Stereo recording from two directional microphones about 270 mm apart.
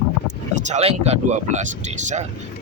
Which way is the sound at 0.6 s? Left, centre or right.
Right.